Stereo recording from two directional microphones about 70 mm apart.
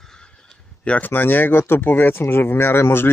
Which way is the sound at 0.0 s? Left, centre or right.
Centre.